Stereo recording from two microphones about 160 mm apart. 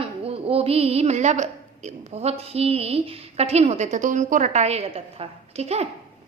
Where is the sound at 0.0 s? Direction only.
35° right (ahead or behind).